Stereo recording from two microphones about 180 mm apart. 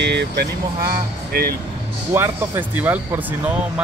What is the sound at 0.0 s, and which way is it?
Speech, 70° right (ahead or behind).